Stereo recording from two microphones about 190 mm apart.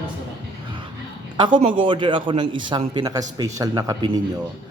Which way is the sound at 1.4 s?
25° right (ahead or behind).